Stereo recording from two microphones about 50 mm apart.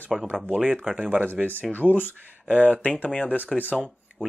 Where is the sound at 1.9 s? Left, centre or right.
Left.